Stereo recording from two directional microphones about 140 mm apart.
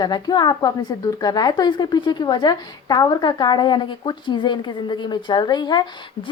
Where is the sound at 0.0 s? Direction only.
30° left (ahead or behind).